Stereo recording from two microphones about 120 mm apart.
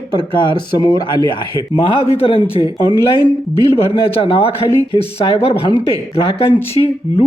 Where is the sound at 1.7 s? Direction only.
50° left (ahead or behind).